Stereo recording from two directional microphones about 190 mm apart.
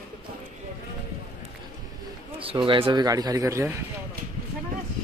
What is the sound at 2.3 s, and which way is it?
A man's voice, 30° right (ahead or behind).